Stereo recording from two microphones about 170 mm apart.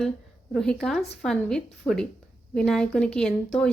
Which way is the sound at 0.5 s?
5° left (ahead or behind).